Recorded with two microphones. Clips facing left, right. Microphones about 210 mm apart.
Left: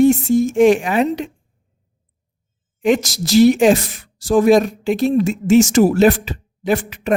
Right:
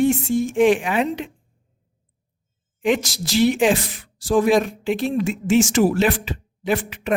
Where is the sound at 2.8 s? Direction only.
45° left (ahead or behind).